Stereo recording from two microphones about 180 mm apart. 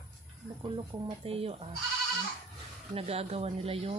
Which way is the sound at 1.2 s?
35° right (ahead or behind).